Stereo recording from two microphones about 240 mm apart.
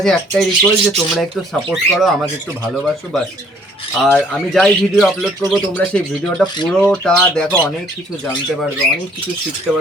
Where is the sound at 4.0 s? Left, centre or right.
Centre.